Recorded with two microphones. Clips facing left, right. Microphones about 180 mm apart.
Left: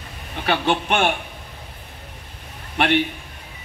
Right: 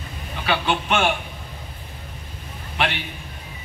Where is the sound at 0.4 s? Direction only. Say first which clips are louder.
Left 2 dB; 55° left (ahead or behind).